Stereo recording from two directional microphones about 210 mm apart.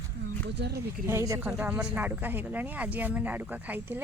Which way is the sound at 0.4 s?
50° right (ahead or behind).